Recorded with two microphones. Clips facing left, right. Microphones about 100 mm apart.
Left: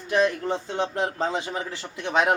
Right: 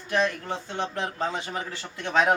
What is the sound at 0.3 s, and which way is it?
A man's voice, 25° left (ahead or behind).